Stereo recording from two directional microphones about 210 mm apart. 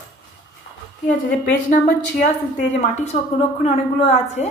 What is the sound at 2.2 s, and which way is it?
A woman's voice, 35° left (ahead or behind).